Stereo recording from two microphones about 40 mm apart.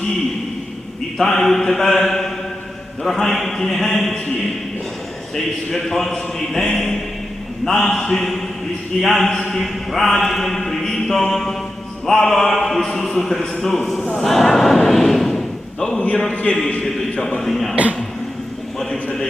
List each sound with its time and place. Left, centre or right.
1.2 s mantra: centre
14.8 s thump: centre
16.3 s a man's voice: left
16.8 s mantra: centre